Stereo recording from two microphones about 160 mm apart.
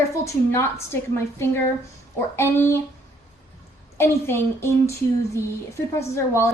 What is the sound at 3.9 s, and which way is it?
A woman's voice, 15° left (ahead or behind).